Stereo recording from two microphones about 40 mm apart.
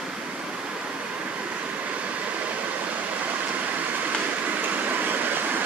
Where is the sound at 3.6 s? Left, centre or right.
Right.